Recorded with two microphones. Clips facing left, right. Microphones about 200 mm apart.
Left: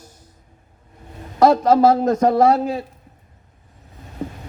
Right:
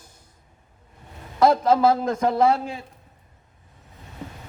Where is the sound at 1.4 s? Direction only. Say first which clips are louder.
Left 4 dB; 45° left (ahead or behind).